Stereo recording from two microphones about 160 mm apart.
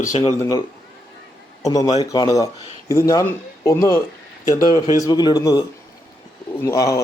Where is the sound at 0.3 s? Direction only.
25° left (ahead or behind).